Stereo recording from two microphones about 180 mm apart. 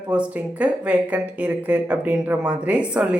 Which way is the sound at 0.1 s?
5° right (ahead or behind).